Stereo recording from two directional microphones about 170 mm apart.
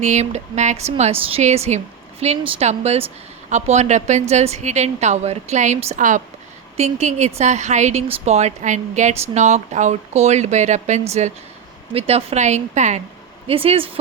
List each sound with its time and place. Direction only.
0.0 s a woman's voice: 45° right (ahead or behind)
13.5 s a woman's voice: 35° right (ahead or behind)